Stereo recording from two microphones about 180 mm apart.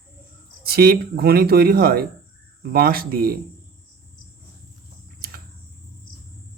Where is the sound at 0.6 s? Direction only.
60° right (ahead or behind).